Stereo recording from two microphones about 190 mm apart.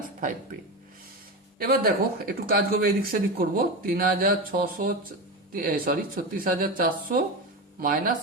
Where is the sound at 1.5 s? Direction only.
50° right (ahead or behind).